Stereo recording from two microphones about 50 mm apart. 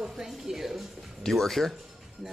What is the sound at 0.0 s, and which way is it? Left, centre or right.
Music, centre.